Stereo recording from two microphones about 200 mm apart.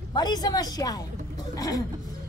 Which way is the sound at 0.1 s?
20° left (ahead or behind).